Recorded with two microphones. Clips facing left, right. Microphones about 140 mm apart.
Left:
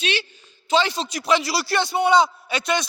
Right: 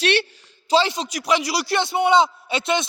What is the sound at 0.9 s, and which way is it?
A man's voice, 15° right (ahead or behind).